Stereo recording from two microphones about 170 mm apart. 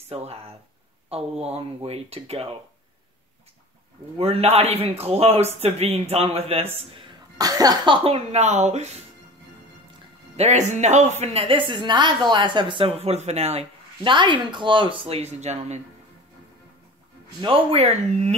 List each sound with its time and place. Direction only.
0.1 s a woman's voice: 35° right (ahead or behind)
4.2 s a woman's voice: 35° right (ahead or behind)
7.3 s a woman's voice: 20° right (ahead or behind); by 9.0 s 40° right (ahead or behind)
10.3 s a woman's voice: 40° right (ahead or behind)
17.4 s a woman's voice: 30° right (ahead or behind)